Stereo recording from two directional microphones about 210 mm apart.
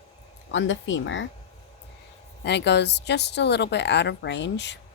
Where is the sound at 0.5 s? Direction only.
60° left (ahead or behind).